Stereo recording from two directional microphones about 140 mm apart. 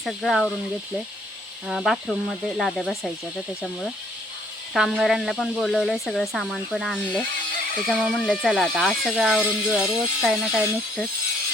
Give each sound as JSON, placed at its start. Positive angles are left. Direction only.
{"t": 0.0, "sound": "speech", "side_deg": 0}
{"t": 1.6, "sound": "speech", "side_deg": 0}